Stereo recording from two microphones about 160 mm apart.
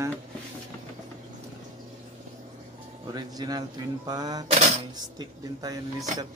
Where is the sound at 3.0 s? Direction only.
25° right (ahead or behind).